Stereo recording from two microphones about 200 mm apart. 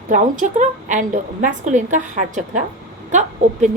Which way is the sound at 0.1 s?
40° right (ahead or behind).